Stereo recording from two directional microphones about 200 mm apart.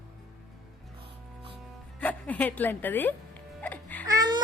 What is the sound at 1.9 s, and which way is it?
Music, 5° left (ahead or behind).